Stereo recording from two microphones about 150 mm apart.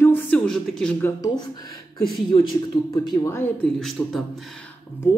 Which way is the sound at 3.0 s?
15° left (ahead or behind).